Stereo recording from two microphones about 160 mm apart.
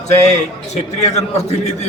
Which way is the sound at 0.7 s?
45° left (ahead or behind).